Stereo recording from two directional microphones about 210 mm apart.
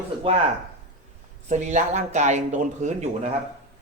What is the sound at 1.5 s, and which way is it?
Speech, 35° right (ahead or behind).